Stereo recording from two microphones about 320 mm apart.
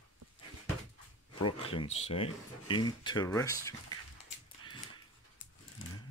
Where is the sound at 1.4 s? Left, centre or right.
Centre.